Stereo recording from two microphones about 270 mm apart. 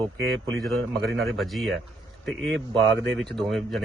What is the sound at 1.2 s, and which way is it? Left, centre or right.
Speech, centre.